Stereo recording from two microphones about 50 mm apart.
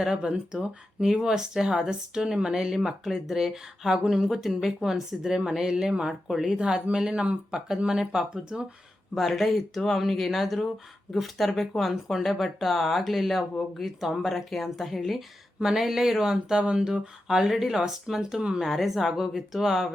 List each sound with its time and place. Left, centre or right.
0.0 s speech: centre
9.1 s speech: centre
18.6 s speech: centre